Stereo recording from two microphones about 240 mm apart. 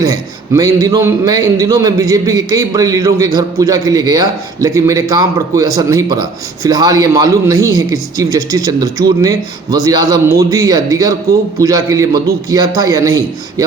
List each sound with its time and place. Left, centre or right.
0.0 s a man's voice: centre